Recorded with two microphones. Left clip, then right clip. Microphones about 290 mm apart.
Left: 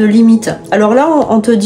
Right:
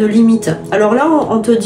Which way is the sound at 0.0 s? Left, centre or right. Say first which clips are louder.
Left 2 dB; left.